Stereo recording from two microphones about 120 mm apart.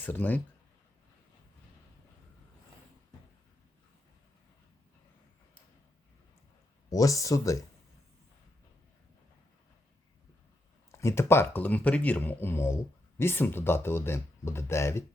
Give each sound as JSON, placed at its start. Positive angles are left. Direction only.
{"t": 0.0, "sound": "speech", "side_deg": 15}
{"t": 6.9, "sound": "speech", "side_deg": 30}
{"t": 10.9, "sound": "speech", "side_deg": 25}